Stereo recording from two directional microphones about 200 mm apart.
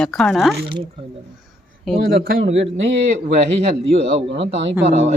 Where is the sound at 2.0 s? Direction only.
50° right (ahead or behind).